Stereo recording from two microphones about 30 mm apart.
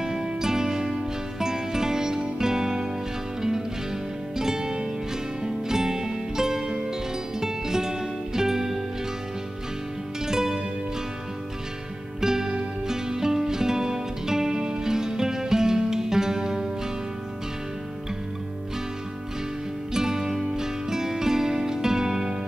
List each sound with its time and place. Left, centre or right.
0.0 s music: centre
4.4 s music: centre
10.2 s music: centre
12.2 s music: centre
19.9 s music: centre